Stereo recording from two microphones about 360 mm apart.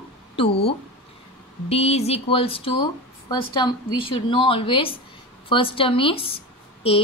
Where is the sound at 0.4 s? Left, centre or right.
Centre.